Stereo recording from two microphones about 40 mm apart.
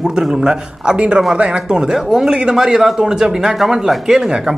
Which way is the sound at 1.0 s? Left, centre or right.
Right.